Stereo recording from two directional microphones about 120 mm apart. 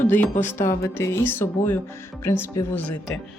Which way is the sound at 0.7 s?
20° left (ahead or behind).